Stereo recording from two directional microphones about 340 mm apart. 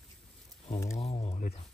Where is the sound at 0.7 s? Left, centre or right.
Centre.